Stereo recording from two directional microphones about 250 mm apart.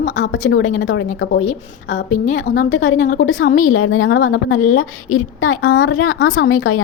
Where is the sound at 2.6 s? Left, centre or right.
Left.